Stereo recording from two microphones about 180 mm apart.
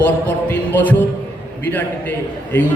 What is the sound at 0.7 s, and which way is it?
A man's voice, 10° left (ahead or behind).